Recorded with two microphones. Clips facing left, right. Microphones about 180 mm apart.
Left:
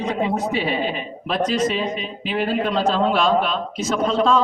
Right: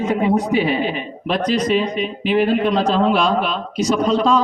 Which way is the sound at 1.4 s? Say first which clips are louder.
Right 1 dB; 25° left (ahead or behind).